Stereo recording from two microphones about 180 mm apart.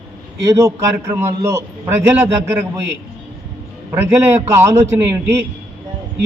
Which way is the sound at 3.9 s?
15° right (ahead or behind).